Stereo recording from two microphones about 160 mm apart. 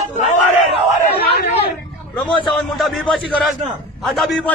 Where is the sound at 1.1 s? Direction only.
75° left (ahead or behind).